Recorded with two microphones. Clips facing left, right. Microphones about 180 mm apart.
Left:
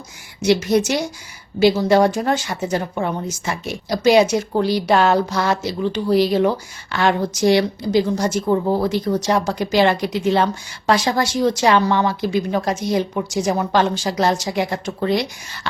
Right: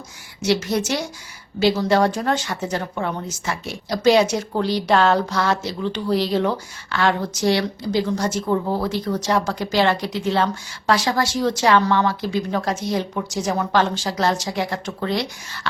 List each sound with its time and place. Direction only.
0.4 s speech: 15° left (ahead or behind)